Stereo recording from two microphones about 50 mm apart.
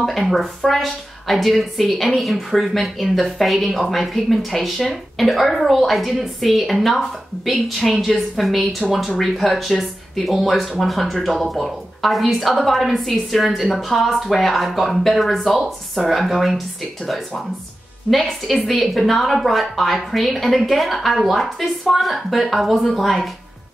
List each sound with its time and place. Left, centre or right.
0.0 s a woman's voice: centre